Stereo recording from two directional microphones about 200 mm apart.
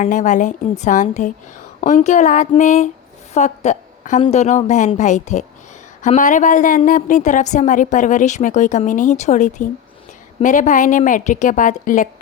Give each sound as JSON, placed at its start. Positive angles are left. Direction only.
{"t": 0.0, "sound": "a woman's voice", "side_deg": 40}